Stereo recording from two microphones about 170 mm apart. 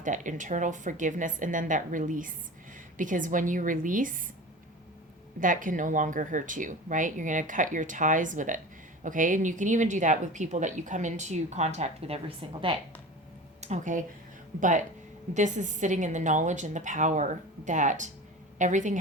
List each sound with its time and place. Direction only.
0.0 s speech: 50° right (ahead or behind)
5.4 s speech: 50° right (ahead or behind)
15.3 s speech: 45° right (ahead or behind)